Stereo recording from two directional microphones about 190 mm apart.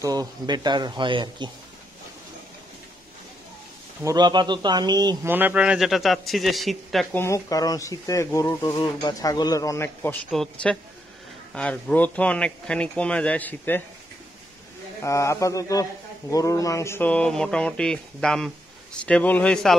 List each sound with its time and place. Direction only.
0.0 s speech: 20° right (ahead or behind)
4.0 s speech: 20° right (ahead or behind)
5.3 s speech: 10° right (ahead or behind)
7.2 s a man's voice: 15° left (ahead or behind)
10.3 s a man's voice: 5° left (ahead or behind)
15.0 s a man's voice: 15° left (ahead or behind)